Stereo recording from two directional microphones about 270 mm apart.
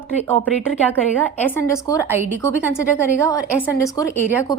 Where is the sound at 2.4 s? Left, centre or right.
Centre.